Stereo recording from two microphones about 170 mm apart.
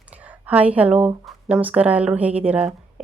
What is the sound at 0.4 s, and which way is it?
A woman's voice, 10° right (ahead or behind).